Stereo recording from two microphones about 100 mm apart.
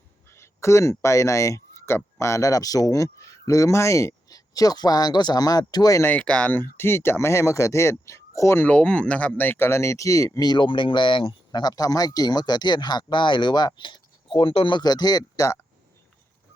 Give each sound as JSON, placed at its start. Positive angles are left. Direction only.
{"t": 0.3, "sound": "speech", "side_deg": 25}
{"t": 6.0, "sound": "speech", "side_deg": 15}
{"t": 8.6, "sound": "speech", "side_deg": 10}
{"t": 11.5, "sound": "speech", "side_deg": 40}
{"t": 14.8, "sound": "speech", "side_deg": 40}